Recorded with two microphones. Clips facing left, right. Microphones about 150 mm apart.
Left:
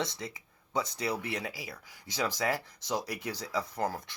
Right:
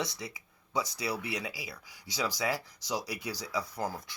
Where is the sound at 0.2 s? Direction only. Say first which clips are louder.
Left 1 dB; 50° left (ahead or behind).